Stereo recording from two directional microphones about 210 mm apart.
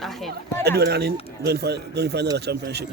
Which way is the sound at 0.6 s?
50° right (ahead or behind).